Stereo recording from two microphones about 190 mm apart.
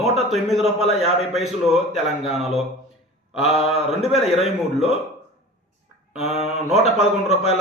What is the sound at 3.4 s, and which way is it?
Speech, 30° left (ahead or behind).